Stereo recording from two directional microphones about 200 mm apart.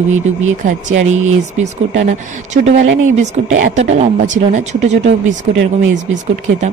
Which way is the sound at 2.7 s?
70° right (ahead or behind).